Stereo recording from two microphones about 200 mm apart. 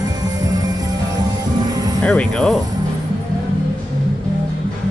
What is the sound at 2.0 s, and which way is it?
Speech, 5° left (ahead or behind).